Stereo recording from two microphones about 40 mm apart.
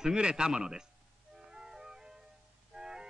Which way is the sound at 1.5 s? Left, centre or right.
Centre.